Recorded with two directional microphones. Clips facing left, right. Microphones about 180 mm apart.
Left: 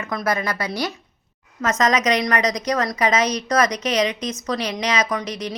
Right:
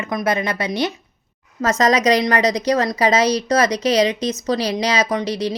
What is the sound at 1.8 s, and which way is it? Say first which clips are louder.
A woman's voice: right 4 dB; 30° right (ahead or behind).